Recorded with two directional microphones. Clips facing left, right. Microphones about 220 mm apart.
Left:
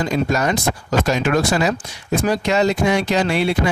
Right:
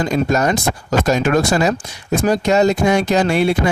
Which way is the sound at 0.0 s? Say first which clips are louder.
Right 3 dB; 45° right (ahead or behind).